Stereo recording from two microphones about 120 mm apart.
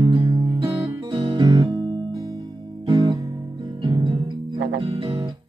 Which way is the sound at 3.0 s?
35° right (ahead or behind).